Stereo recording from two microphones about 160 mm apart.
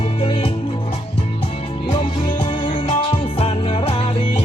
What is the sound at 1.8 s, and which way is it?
Music, 30° left (ahead or behind).